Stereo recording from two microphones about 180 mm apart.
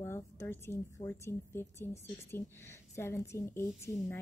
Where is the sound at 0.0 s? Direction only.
15° left (ahead or behind).